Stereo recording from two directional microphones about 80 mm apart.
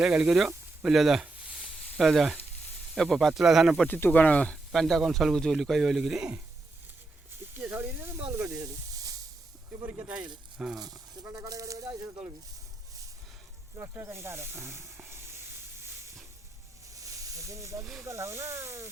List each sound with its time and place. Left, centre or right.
0.0 s speech: centre
3.8 s speech: left
4.7 s speech: centre
7.5 s speech: right
8.3 s snake: right
9.8 s speech: right
10.8 s a sound: right
11.3 s speech: right
13.9 s snake: right
16.9 s snake: right
18.0 s speech: right